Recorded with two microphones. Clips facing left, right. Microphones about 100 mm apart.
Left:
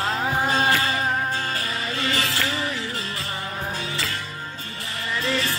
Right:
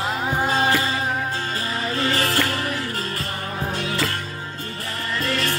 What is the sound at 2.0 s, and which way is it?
Music, 40° right (ahead or behind).